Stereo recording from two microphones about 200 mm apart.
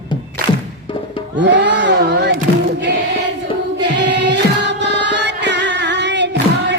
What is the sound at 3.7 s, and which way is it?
Music, 60° right (ahead or behind).